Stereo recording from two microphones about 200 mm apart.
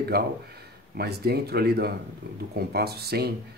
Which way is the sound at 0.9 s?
55° right (ahead or behind).